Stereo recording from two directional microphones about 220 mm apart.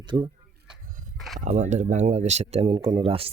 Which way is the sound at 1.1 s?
Centre (ahead or behind).